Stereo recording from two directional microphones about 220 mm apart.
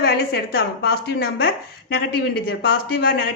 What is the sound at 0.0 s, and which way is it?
A woman's voice, 45° left (ahead or behind).